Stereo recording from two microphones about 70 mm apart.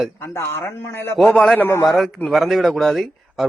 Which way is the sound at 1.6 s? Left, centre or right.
Left.